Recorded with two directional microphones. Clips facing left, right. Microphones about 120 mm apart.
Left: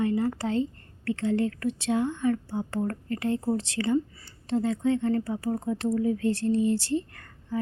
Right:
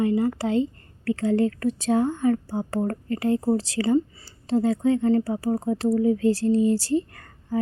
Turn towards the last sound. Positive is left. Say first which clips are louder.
# right 3 dB
turn(degrees=-35)  # may be behind; listen again after turning